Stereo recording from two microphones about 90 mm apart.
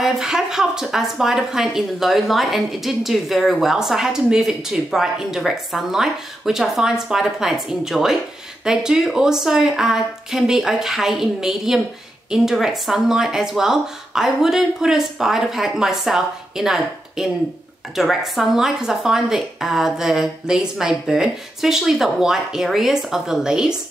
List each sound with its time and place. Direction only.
0.0 s speech: 5° right (ahead or behind)